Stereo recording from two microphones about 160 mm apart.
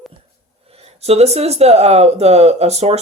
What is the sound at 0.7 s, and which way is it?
Speech, 40° right (ahead or behind).